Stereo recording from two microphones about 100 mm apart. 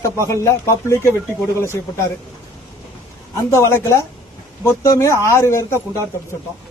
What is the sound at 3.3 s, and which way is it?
A man's voice, 30° left (ahead or behind).